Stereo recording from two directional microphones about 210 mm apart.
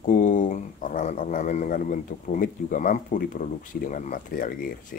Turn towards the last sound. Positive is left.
turn(degrees=40)  # may be behind; listen again after turning